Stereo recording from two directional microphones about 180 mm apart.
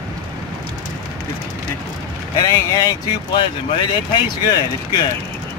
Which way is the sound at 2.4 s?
20° left (ahead or behind).